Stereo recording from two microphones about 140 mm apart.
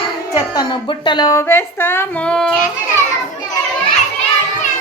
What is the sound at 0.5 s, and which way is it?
Speech, 35° left (ahead or behind).